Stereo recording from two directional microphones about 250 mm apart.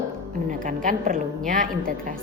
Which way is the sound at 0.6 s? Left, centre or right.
Right.